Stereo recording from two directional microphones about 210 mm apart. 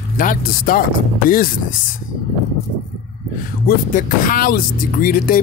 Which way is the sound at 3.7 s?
40° left (ahead or behind).